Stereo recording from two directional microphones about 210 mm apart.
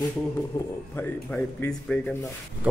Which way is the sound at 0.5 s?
15° left (ahead or behind).